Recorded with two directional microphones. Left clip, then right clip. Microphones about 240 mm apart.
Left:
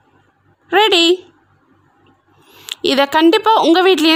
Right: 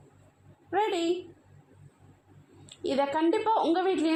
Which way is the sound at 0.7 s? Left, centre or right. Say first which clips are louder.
Left 16 dB; left.